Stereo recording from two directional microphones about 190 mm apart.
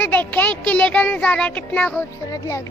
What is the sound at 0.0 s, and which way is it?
Speech, 10° left (ahead or behind).